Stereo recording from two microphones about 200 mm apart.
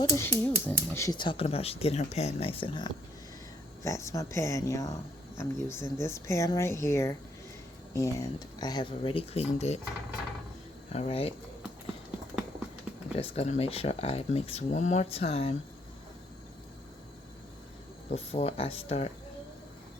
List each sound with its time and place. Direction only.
0.0 s speech: 10° left (ahead or behind); by 9.8 s 35° left (ahead or behind)
10.9 s speech: 30° left (ahead or behind)
13.1 s speech: 30° left (ahead or behind)
18.1 s speech: 30° left (ahead or behind)